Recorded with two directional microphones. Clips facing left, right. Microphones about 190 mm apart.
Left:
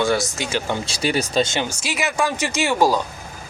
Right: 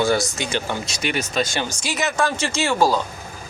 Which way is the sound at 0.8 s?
35° left (ahead or behind).